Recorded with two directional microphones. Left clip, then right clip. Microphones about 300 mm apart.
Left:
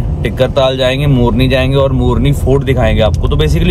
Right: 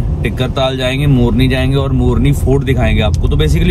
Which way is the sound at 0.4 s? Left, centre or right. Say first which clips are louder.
Left 5 dB; centre.